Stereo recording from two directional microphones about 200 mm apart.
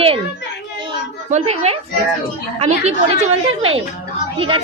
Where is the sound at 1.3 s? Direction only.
30° right (ahead or behind).